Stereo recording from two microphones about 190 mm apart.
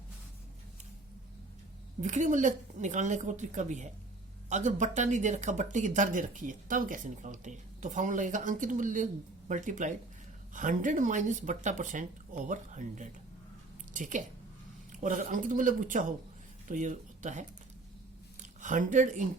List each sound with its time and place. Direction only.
2.0 s speech: 40° right (ahead or behind)
18.6 s speech: 45° right (ahead or behind)